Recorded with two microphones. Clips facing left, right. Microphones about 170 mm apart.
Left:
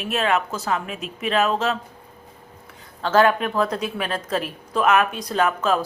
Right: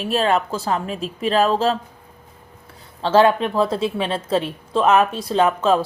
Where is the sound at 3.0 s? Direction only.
30° right (ahead or behind).